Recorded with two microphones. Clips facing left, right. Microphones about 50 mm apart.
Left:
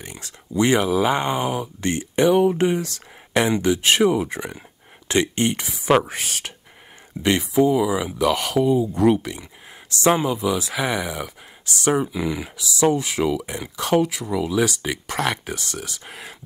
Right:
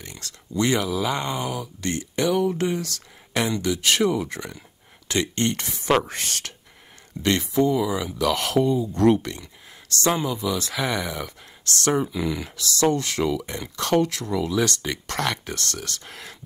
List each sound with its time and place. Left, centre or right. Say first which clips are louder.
0.0 s speech: left 2 dB; centre